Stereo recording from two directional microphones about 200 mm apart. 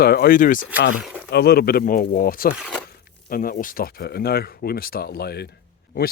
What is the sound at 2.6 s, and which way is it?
Crumpling, centre (ahead or behind).